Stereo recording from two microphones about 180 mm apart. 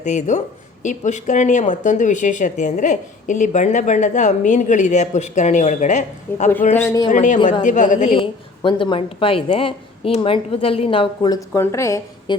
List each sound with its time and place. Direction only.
0.0 s speech: 40° left (ahead or behind)
6.8 s a woman's voice: 20° left (ahead or behind)
7.1 s a woman's voice: 45° left (ahead or behind); by 12.4 s 15° left (ahead or behind)